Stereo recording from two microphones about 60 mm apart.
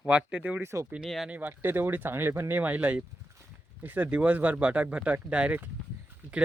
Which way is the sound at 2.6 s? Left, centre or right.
Right.